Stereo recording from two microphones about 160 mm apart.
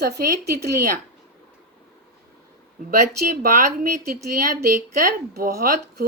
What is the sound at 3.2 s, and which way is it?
Speech, 60° right (ahead or behind).